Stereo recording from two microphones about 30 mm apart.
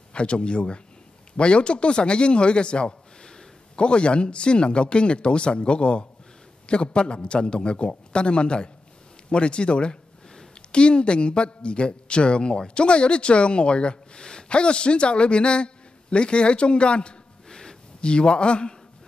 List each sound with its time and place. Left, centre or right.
0.1 s a man's voice: left
17.5 s a sound: left
18.0 s speech: left